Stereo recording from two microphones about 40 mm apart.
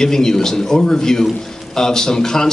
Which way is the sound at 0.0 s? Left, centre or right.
Centre.